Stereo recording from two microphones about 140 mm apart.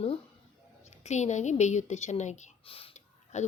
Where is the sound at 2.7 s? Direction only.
40° left (ahead or behind).